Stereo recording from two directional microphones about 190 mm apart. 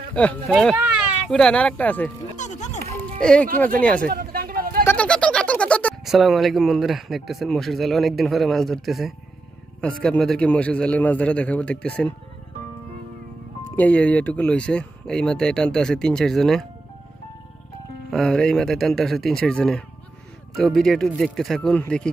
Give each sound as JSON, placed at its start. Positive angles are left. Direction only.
{"t": 0.1, "sound": "speech", "side_deg": 5}
{"t": 2.3, "sound": "music", "side_deg": 40}
{"t": 3.0, "sound": "music", "side_deg": 5}
{"t": 3.5, "sound": "speech", "side_deg": 10}
{"t": 4.1, "sound": "a sound", "side_deg": -50}
{"t": 4.8, "sound": "speech", "side_deg": 5}
{"t": 13.7, "sound": "speech", "side_deg": 10}
{"t": 18.1, "sound": "speech", "side_deg": 5}